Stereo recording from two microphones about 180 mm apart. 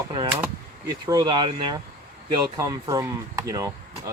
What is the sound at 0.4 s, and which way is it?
Speech, 20° right (ahead or behind).